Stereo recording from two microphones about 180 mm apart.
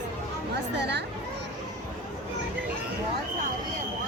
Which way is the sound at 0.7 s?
70° right (ahead or behind).